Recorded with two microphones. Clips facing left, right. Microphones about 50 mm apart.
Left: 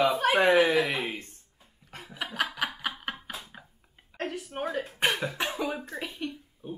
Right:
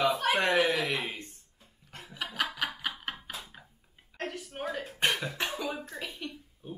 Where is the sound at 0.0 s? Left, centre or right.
Centre.